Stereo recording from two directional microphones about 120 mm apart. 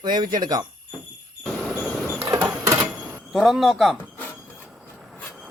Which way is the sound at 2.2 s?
30° right (ahead or behind).